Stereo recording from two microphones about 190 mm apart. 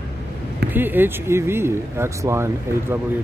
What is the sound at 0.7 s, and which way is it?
Speech, 10° right (ahead or behind).